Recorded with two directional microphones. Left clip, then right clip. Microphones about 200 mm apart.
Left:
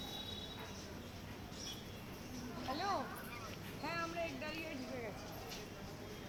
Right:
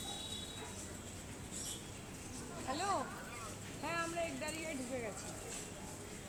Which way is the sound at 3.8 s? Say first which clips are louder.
Right 2 dB; 25° right (ahead or behind).